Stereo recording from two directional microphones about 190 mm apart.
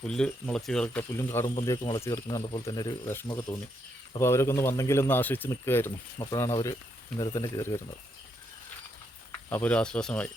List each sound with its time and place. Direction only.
0.0 s a man's voice: 5° left (ahead or behind)
9.5 s a man's voice: 10° left (ahead or behind)